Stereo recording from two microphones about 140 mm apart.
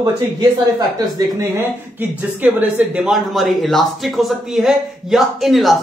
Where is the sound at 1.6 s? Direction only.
15° right (ahead or behind).